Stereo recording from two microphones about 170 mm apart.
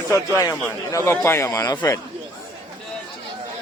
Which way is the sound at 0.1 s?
20° left (ahead or behind).